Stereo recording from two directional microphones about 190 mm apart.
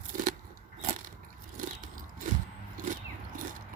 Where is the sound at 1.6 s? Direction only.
45° right (ahead or behind).